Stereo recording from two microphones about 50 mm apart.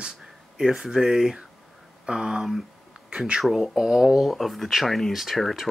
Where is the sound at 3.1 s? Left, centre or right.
Right.